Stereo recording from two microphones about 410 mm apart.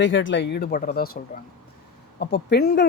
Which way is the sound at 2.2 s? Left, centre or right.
Left.